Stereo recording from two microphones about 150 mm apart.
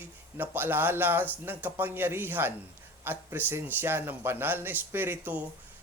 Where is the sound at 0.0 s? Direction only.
15° right (ahead or behind).